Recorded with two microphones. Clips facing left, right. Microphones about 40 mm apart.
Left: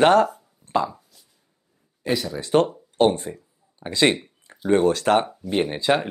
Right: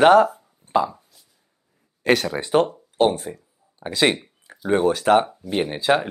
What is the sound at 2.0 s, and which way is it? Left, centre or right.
Speech, right.